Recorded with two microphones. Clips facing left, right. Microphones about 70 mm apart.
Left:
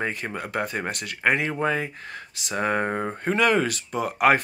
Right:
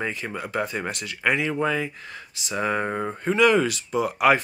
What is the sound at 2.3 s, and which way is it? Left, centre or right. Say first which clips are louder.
Speech: even; left.